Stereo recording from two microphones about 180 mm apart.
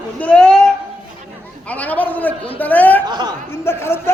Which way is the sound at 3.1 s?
20° right (ahead or behind).